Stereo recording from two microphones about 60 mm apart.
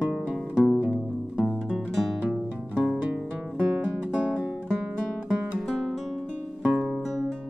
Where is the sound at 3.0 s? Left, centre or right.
Right.